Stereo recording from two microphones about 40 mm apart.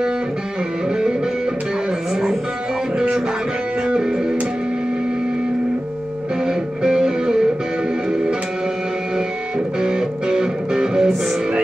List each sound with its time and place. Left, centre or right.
3.8 s music: right
6.4 s music: centre
9.8 s music: centre